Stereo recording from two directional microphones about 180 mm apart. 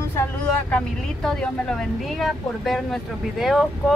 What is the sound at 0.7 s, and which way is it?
Speech, 5° left (ahead or behind).